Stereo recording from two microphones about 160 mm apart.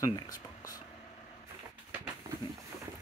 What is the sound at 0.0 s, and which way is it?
Speech, 20° left (ahead or behind).